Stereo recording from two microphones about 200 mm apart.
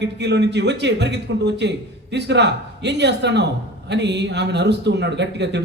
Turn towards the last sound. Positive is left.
turn(degrees=-60)  # may be behind; listen again after turning